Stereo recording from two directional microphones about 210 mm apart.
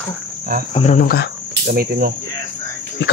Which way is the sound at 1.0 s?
50° left (ahead or behind).